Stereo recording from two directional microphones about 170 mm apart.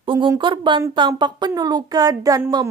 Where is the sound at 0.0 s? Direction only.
30° right (ahead or behind).